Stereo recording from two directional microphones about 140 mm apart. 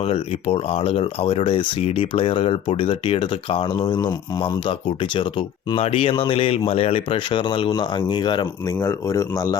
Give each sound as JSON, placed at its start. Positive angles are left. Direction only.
{"t": 0.0, "sound": "speech", "side_deg": 45}
{"t": 8.8, "sound": "speech", "side_deg": 20}